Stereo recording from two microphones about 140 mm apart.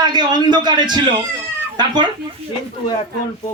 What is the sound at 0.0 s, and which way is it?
Speech, 30° right (ahead or behind).